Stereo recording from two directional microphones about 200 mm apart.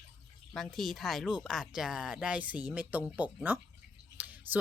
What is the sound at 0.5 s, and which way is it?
Speech, centre (ahead or behind).